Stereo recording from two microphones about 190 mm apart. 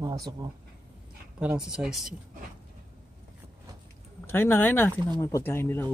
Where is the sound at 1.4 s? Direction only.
5° right (ahead or behind).